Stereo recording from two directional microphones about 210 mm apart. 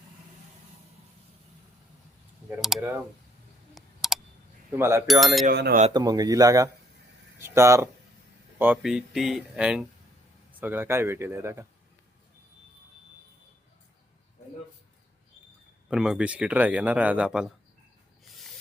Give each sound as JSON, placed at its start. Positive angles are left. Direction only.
{"t": 2.6, "sound": "speech", "side_deg": 0}
{"t": 3.8, "sound": "a sound", "side_deg": 0}
{"t": 4.8, "sound": "speech", "side_deg": -10}
{"t": 5.0, "sound": "speech", "side_deg": 0}
{"t": 5.5, "sound": "speech", "side_deg": -45}
{"t": 5.9, "sound": "speech", "side_deg": -20}
{"t": 15.9, "sound": "speech", "side_deg": -5}